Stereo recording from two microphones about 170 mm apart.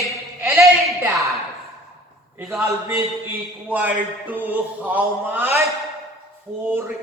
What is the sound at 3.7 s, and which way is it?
Mantra, 10° right (ahead or behind).